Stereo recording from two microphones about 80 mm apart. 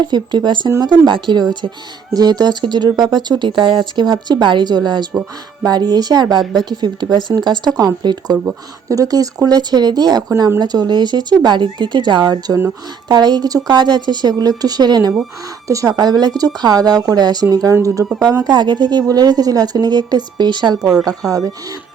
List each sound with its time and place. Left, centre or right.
0.1 s speech: right
6.4 s a woman's voice: centre
6.7 s speech: right
8.9 s speech: right
15.6 s a woman's voice: right
18.4 s speech: right
21.0 s a woman's voice: right